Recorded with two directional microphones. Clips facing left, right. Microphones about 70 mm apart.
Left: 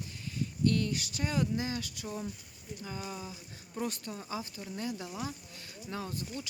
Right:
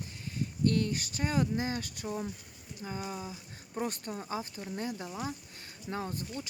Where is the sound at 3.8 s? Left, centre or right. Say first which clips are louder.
Right 2 dB; right.